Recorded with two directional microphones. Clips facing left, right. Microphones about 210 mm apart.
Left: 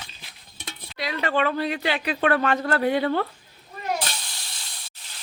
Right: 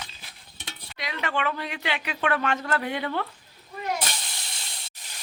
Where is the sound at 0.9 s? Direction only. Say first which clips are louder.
Left 5 dB; 35° left (ahead or behind).